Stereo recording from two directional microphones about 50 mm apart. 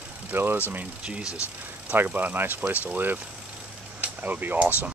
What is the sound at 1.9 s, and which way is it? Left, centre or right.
Speech, right.